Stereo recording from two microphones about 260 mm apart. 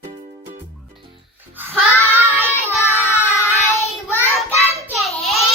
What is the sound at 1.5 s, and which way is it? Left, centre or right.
Music, centre.